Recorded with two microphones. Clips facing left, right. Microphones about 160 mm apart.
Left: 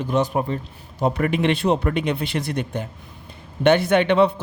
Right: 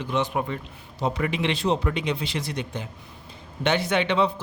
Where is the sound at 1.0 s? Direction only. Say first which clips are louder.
Left 5 dB; 55° left (ahead or behind).